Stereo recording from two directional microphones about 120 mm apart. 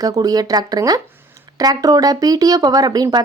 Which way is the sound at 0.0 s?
30° right (ahead or behind).